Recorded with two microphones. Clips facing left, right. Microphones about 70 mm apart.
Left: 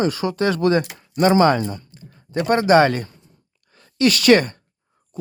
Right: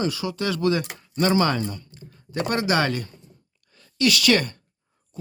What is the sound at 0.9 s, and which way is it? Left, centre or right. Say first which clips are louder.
Speech: left 5 dB; left.